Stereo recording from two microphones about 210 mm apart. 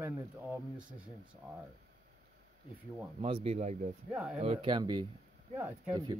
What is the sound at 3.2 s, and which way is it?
Speech, 25° right (ahead or behind).